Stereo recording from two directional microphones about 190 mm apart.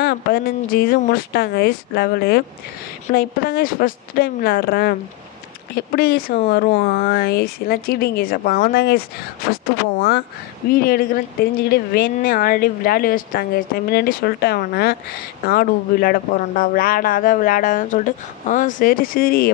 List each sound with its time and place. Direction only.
0.0 s a woman's voice: 55° left (ahead or behind)
10.7 s speech: 50° left (ahead or behind)